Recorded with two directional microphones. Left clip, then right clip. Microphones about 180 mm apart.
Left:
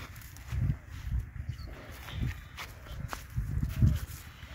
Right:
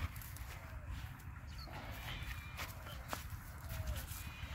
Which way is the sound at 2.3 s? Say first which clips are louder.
Left 4 dB; 55° left (ahead or behind).